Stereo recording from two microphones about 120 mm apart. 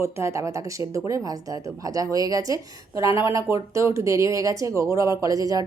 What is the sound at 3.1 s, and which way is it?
Speech, 45° left (ahead or behind).